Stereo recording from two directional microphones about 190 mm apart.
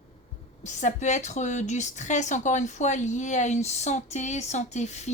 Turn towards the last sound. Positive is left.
turn(degrees=35)  # may be behind; listen again after turning